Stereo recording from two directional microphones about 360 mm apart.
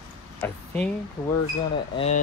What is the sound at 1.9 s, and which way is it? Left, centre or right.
Speech, centre.